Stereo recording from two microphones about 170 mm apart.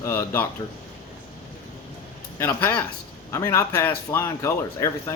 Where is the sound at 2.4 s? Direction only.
15° left (ahead or behind).